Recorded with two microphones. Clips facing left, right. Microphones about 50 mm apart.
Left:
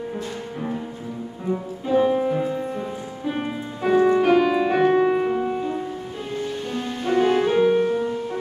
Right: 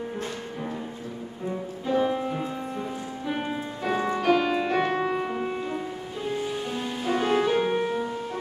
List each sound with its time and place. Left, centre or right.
1.5 s music: centre
5.4 s music: centre